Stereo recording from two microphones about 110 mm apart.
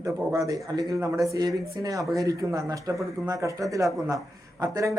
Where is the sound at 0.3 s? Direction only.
30° right (ahead or behind).